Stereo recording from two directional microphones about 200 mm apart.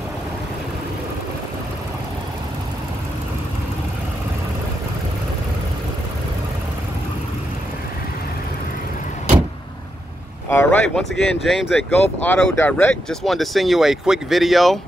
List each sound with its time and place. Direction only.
10.5 s speech: 10° left (ahead or behind)